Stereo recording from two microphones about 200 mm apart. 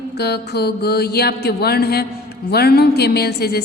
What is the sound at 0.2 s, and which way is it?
A woman's voice, 55° left (ahead or behind).